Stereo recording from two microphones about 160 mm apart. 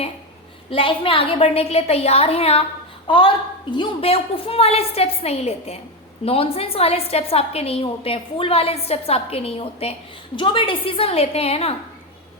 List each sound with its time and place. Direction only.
0.7 s a woman's voice: 35° left (ahead or behind)